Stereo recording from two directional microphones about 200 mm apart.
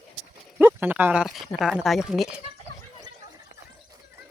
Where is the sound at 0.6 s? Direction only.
10° right (ahead or behind).